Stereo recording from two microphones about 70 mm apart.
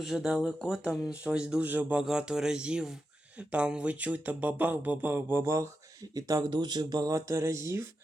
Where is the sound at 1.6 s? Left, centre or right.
Right.